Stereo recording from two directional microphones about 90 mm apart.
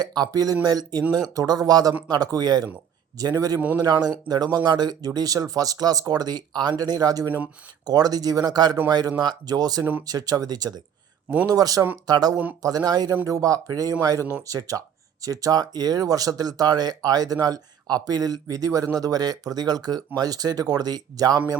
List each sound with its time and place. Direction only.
0.0 s speech: 50° right (ahead or behind)
3.6 s a man's voice: 15° right (ahead or behind)
4.0 s speech: 45° right (ahead or behind)